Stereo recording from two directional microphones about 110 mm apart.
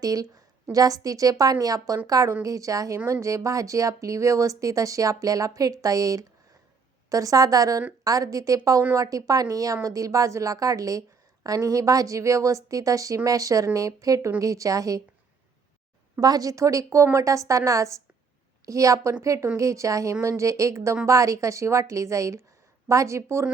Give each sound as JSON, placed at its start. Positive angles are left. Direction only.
{"t": 0.0, "sound": "a woman's voice", "side_deg": -35}
{"t": 16.1, "sound": "speech", "side_deg": -35}